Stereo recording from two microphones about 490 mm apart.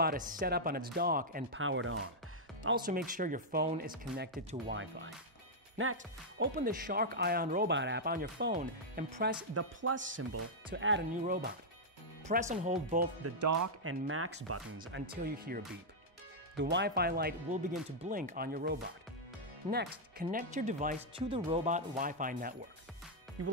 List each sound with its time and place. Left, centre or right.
0.0 s speech: centre
13.2 s speech: right
14.0 s speech: right